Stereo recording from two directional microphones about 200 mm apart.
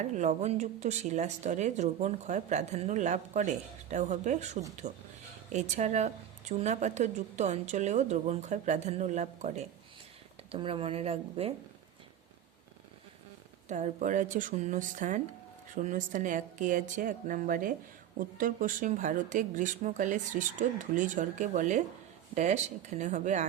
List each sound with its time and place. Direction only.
0.0 s speech: 35° right (ahead or behind)
13.7 s speech: 35° right (ahead or behind)